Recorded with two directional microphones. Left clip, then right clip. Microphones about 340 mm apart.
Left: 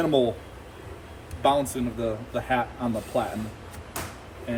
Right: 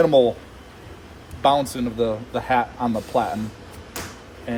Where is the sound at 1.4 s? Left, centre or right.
Right.